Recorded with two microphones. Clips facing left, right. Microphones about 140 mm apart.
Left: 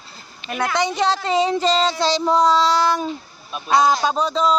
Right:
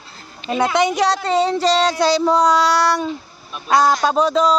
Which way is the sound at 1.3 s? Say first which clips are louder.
Right 1 dB; 10° left (ahead or behind).